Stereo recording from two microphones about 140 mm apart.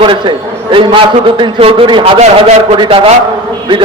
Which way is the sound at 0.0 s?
35° right (ahead or behind).